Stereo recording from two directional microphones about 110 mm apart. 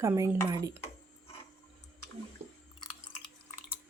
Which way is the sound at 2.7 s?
45° left (ahead or behind).